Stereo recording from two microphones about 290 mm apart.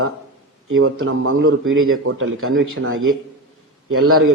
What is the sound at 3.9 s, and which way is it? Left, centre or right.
Speech, right.